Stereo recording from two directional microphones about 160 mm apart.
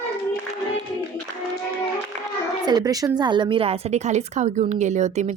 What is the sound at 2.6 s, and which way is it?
Speech, 25° right (ahead or behind).